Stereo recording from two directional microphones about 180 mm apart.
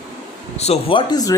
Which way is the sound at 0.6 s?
35° left (ahead or behind).